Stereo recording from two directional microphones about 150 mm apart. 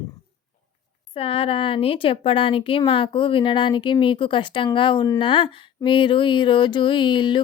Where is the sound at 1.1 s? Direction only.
40° left (ahead or behind).